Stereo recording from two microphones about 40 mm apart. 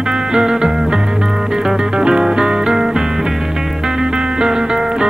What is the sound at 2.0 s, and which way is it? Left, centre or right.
Music, centre.